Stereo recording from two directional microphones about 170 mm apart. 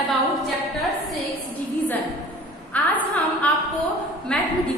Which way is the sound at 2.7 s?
10° left (ahead or behind).